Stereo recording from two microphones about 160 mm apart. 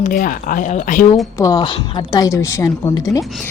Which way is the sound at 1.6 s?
30° left (ahead or behind).